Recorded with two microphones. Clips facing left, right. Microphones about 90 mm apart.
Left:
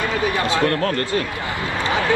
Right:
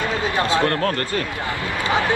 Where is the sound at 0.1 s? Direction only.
25° right (ahead or behind).